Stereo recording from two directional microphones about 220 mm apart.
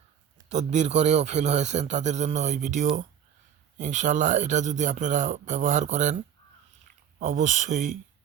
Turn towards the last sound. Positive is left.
turn(degrees=-35)  # may be behind; listen again after turning